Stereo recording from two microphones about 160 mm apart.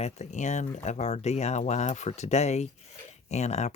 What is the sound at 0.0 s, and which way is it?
Speech, 45° left (ahead or behind).